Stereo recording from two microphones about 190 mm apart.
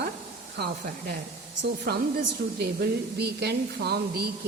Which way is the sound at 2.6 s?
55° right (ahead or behind).